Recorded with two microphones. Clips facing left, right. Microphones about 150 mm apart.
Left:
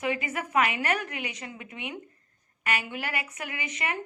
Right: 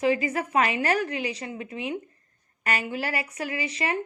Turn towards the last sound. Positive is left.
turn(degrees=-35)  # may be behind; listen again after turning